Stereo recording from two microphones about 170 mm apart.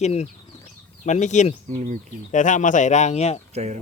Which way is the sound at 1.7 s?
45° right (ahead or behind).